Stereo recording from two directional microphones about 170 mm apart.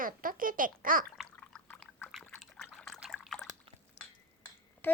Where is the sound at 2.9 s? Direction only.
Centre (ahead or behind).